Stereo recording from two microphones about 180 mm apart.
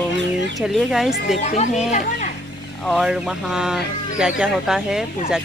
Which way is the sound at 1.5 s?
40° left (ahead or behind).